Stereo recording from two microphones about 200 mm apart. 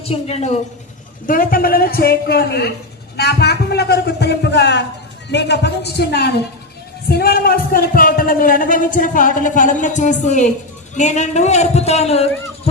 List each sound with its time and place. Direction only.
0.0 s a man's voice: 30° left (ahead or behind)
1.3 s a man's voice: 45° left (ahead or behind)